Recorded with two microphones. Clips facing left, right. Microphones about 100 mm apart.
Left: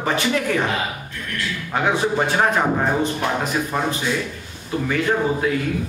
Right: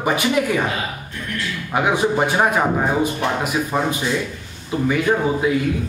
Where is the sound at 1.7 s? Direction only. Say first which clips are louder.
Right 2 dB; 15° right (ahead or behind).